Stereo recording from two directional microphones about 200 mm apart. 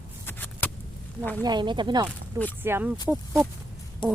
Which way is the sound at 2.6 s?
10° right (ahead or behind).